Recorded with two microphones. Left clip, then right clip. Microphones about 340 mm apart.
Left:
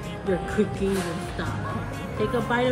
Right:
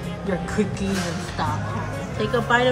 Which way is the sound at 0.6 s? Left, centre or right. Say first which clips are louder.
Right 1 dB; right.